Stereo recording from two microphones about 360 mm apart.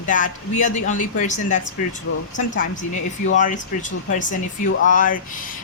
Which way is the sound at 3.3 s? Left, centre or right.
Left.